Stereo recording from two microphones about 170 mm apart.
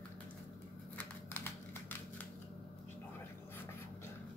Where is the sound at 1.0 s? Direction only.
10° left (ahead or behind).